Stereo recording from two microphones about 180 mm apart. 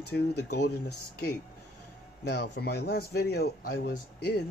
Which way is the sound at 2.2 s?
65° left (ahead or behind).